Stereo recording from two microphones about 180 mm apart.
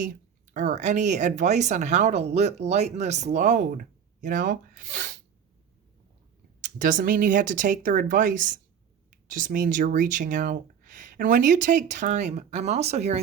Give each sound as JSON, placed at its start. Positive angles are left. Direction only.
{"t": 0.5, "sound": "speech", "side_deg": -45}
{"t": 6.6, "sound": "speech", "side_deg": -50}